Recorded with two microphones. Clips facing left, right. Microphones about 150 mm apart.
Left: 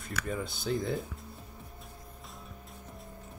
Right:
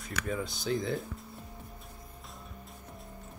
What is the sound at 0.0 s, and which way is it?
Speech, centre (ahead or behind).